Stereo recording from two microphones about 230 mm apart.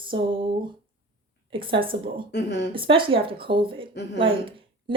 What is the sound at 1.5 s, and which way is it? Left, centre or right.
Speech, right.